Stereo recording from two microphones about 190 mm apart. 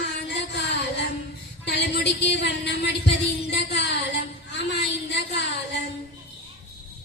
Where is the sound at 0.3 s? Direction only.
60° left (ahead or behind).